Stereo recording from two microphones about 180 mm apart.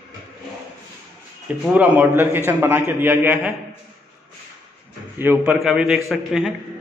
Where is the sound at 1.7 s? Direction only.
10° right (ahead or behind).